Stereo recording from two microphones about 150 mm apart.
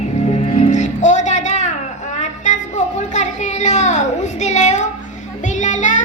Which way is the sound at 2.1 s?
55° left (ahead or behind).